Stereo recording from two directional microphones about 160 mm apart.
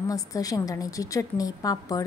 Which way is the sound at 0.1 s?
20° left (ahead or behind).